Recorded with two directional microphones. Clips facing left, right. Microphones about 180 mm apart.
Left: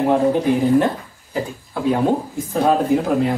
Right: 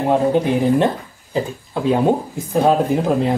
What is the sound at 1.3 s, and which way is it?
Speech, 25° right (ahead or behind).